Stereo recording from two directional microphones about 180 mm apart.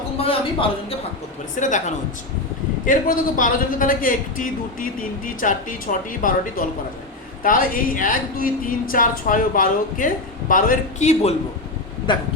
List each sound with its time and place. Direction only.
0.2 s a man's voice: 30° left (ahead or behind)
1.5 s a man's voice: 45° left (ahead or behind)
2.8 s a man's voice: 50° left (ahead or behind)